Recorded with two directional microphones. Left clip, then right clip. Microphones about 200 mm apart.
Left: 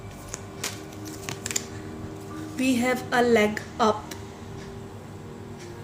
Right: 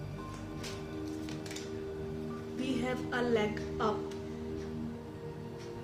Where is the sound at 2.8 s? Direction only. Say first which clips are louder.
Left 12 dB; 40° left (ahead or behind).